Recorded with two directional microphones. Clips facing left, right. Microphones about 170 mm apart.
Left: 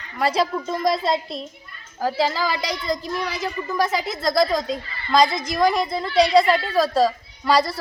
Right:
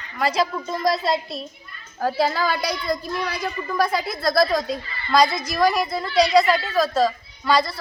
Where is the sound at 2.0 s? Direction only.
5° left (ahead or behind); by 7.7 s 35° left (ahead or behind).